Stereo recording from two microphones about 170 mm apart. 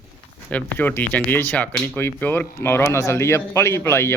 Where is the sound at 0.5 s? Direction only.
10° left (ahead or behind).